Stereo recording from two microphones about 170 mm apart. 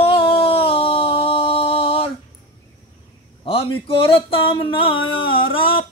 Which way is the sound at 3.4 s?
35° left (ahead or behind).